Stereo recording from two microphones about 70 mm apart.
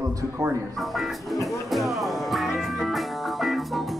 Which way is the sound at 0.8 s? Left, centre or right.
Centre.